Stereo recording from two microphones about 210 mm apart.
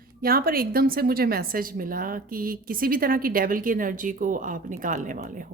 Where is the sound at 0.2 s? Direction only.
45° right (ahead or behind).